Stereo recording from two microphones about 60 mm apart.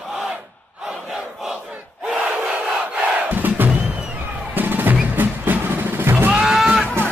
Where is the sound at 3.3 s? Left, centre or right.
Right.